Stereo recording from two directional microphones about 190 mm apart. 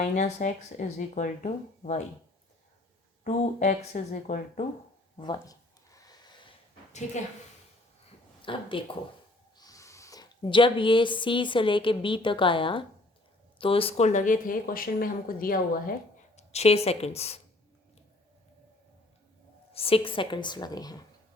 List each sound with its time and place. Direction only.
0.0 s speech: 40° left (ahead or behind)
3.2 s speech: 40° left (ahead or behind)
5.1 s a sound: 25° left (ahead or behind)
8.4 s speech: 25° left (ahead or behind); by 16.0 s 50° left (ahead or behind)
16.3 s a woman's voice: 35° left (ahead or behind)
19.7 s a woman's voice: 30° left (ahead or behind)